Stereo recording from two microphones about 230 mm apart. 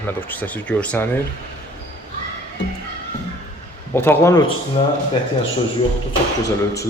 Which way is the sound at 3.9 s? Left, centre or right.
Centre.